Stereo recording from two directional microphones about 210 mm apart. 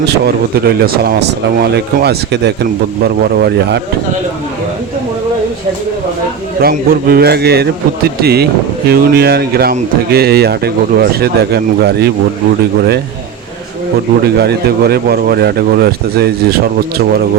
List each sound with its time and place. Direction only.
0.1 s speech: 50° right (ahead or behind)
6.6 s speech: 45° right (ahead or behind)
14.3 s speech: 50° right (ahead or behind)